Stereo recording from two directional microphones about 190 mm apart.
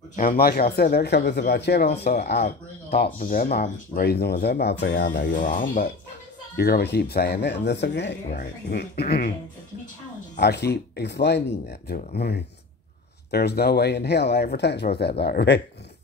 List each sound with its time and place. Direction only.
0.1 s speech: 50° left (ahead or behind)
3.2 s speech: 50° left (ahead or behind); by 5.3 s 65° left (ahead or behind)
5.3 s speech: 45° left (ahead or behind)
6.5 s speech: 60° left (ahead or behind)
8.3 s speech: 55° left (ahead or behind)
10.4 s speech: 60° left (ahead or behind)
13.3 s speech: 55° left (ahead or behind)